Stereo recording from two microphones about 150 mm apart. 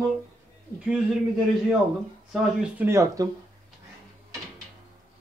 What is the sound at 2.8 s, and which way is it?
Speech, 20° right (ahead or behind).